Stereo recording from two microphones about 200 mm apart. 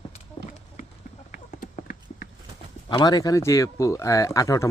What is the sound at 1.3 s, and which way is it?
Clip-clop, 45° left (ahead or behind).